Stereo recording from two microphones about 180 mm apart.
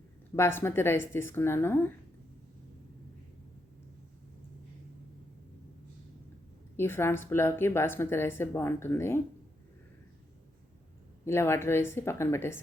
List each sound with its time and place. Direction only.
0.3 s a woman's voice: 15° left (ahead or behind)
6.7 s a woman's voice: 15° left (ahead or behind)
11.3 s a woman's voice: 15° left (ahead or behind)